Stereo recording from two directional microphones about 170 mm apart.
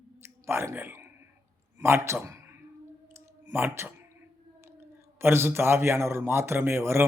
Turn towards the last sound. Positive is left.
turn(degrees=-15)  # may be behind; listen again after turning